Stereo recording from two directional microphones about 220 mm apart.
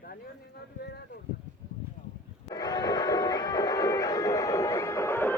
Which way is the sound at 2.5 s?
20° left (ahead or behind).